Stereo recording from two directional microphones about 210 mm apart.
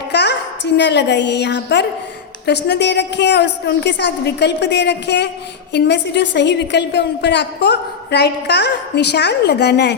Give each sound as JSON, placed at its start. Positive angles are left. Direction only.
{"t": 0.1, "sound": "a woman's voice", "side_deg": 55}